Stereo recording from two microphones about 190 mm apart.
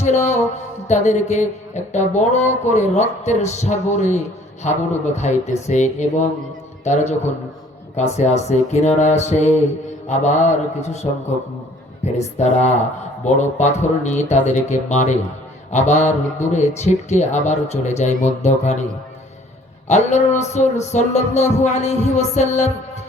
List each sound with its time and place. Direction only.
0.0 s speech: 35° left (ahead or behind)
19.9 s speech: 40° left (ahead or behind)